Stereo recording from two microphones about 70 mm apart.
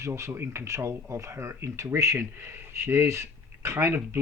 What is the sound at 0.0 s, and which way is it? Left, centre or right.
Speech, right.